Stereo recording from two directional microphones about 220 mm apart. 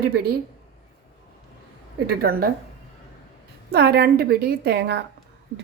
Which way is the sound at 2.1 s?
45° right (ahead or behind).